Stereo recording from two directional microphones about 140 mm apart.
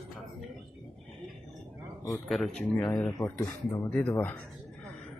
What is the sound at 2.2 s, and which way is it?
A man's voice, centre (ahead or behind).